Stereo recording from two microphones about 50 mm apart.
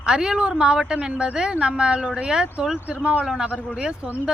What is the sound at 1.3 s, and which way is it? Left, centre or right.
A woman's voice, centre.